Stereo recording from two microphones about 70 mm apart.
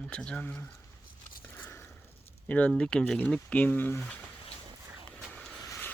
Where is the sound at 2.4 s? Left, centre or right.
Left.